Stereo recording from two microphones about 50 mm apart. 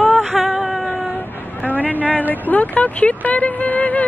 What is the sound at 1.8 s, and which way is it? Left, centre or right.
Speech, left.